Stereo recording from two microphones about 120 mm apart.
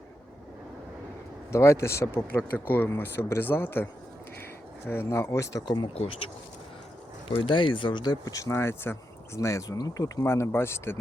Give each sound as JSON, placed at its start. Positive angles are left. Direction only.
{"t": 1.5, "sound": "speech", "side_deg": 25}
{"t": 4.9, "sound": "speech", "side_deg": 20}
{"t": 5.9, "sound": "speech", "side_deg": 55}
{"t": 7.3, "sound": "speech", "side_deg": 45}